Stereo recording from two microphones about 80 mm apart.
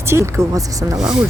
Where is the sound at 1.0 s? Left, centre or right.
Centre.